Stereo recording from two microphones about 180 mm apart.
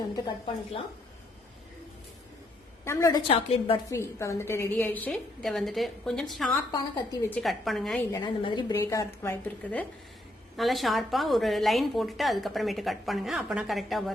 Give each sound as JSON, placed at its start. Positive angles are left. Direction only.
{"t": 2.8, "sound": "a woman's voice", "side_deg": 15}
{"t": 3.2, "sound": "a woman's voice", "side_deg": 30}
{"t": 3.8, "sound": "a woman's voice", "side_deg": 15}
{"t": 6.7, "sound": "a woman's voice", "side_deg": 20}
{"t": 7.3, "sound": "a woman's voice", "side_deg": 5}
{"t": 8.1, "sound": "a woman's voice", "side_deg": 25}
{"t": 8.7, "sound": "a woman's voice", "side_deg": 15}
{"t": 10.6, "sound": "a woman's voice", "side_deg": 0}